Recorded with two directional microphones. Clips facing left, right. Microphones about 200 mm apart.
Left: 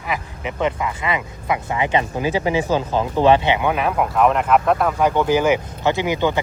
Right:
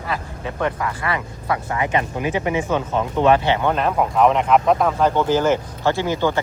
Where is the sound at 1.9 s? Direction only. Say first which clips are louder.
Left 2 dB; 30° left (ahead or behind).